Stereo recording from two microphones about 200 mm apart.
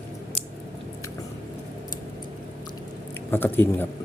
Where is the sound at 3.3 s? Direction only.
10° left (ahead or behind).